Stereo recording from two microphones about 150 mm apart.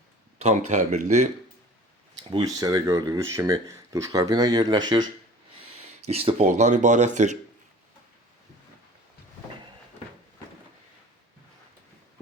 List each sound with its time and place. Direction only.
0.3 s speech: 50° right (ahead or behind)
2.3 s speech: 25° right (ahead or behind)
6.0 s speech: 40° right (ahead or behind)